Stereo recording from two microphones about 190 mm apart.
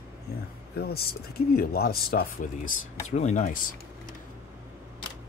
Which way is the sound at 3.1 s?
40° left (ahead or behind).